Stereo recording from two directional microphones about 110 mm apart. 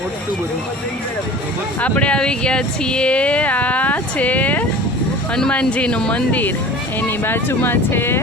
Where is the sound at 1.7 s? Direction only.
15° left (ahead or behind).